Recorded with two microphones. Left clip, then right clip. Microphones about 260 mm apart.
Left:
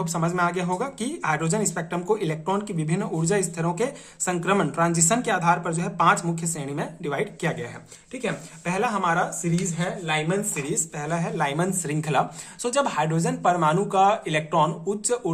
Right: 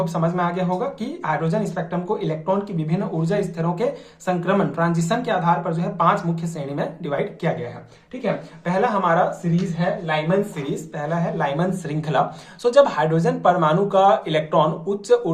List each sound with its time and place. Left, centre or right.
0.0 s speech: left